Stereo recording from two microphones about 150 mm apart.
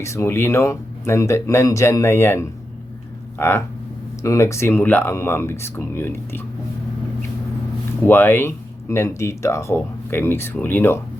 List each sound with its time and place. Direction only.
0.0 s speech: 20° left (ahead or behind)
8.0 s speech: 15° left (ahead or behind)